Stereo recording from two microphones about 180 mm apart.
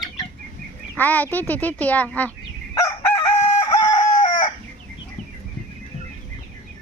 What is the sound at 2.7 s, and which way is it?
Chicken, 20° left (ahead or behind).